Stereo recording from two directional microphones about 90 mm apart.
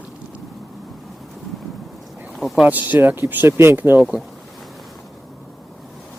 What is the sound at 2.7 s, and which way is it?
Speech, 20° right (ahead or behind).